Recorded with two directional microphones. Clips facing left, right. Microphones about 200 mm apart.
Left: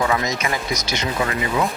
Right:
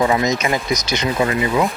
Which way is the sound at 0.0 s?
20° right (ahead or behind).